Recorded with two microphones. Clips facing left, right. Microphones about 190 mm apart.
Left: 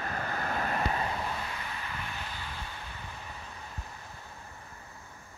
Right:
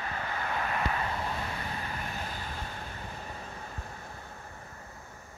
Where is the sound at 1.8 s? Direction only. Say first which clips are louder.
Right 2 dB; 45° right (ahead or behind).